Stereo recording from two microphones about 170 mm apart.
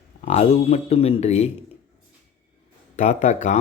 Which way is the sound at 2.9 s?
45° left (ahead or behind).